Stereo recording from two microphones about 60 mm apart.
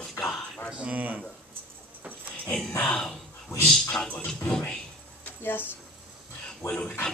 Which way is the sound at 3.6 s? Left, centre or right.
Centre.